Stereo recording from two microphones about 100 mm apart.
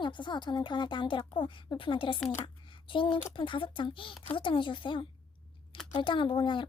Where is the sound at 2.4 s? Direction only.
55° left (ahead or behind).